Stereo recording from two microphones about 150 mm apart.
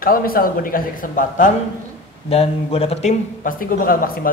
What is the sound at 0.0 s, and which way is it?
A man's voice, 75° left (ahead or behind).